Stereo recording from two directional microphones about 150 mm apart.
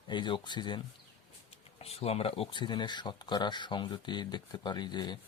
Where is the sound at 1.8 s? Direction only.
45° left (ahead or behind).